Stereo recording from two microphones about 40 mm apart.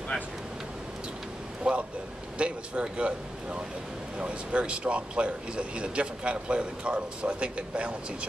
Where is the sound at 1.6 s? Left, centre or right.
Right.